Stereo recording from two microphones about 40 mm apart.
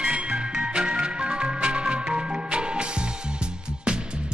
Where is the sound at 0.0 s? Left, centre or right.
Right.